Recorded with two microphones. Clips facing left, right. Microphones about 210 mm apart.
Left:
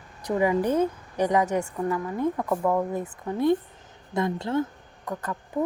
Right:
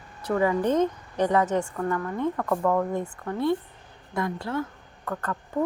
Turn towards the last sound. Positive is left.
turn(degrees=15)  # may be behind; listen again after turning